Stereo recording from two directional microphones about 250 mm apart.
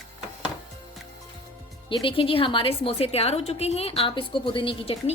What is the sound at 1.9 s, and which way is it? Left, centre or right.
A woman's voice, left.